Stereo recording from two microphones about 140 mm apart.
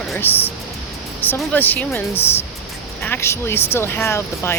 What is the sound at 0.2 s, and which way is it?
Speech, 15° left (ahead or behind).